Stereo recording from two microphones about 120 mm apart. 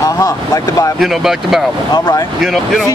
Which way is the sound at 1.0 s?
Centre (ahead or behind).